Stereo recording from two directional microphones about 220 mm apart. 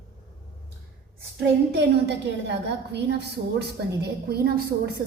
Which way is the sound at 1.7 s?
50° right (ahead or behind).